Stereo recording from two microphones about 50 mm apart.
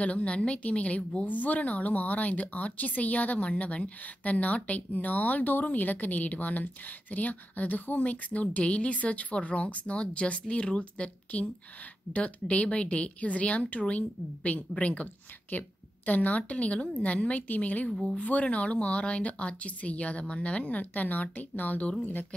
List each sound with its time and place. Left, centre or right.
0.0 s a woman's voice: left
15.5 s a woman's voice: left
17.8 s speech: centre
18.1 s a woman's voice: left